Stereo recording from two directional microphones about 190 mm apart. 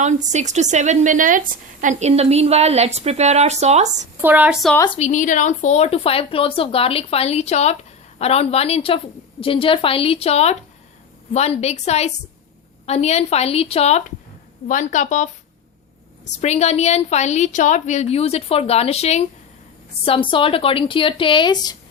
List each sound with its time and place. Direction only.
0.0 s a woman's voice: 40° right (ahead or behind)
4.2 s a woman's voice: 10° right (ahead or behind)
4.9 s a woman's voice: 35° left (ahead or behind)
16.3 s a woman's voice: 35° left (ahead or behind)